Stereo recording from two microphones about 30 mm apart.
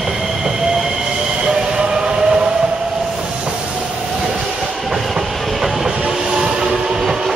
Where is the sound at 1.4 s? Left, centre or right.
Right.